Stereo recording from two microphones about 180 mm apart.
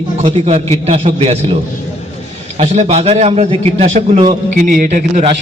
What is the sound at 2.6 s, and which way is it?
A man's voice, 35° right (ahead or behind).